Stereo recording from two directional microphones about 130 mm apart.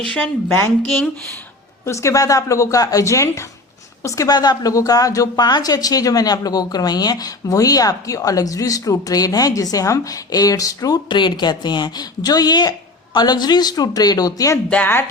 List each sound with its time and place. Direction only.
0.1 s speech: 10° left (ahead or behind)
1.8 s a woman's voice: 20° left (ahead or behind)
14.7 s speech: 15° left (ahead or behind)